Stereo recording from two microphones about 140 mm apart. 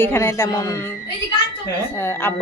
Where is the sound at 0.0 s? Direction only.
20° left (ahead or behind).